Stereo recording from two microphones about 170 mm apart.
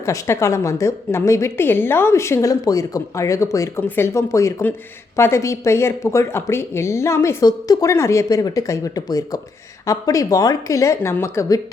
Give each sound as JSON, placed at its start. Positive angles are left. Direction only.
{"t": 0.0, "sound": "a woman's voice", "side_deg": 15}